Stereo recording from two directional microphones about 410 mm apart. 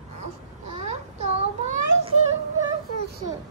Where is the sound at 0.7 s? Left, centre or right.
Centre.